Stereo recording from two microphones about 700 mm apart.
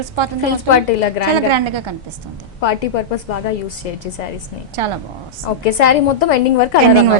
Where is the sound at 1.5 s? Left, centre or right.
Right.